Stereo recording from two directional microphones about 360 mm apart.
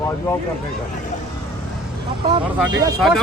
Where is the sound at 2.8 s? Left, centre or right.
Centre.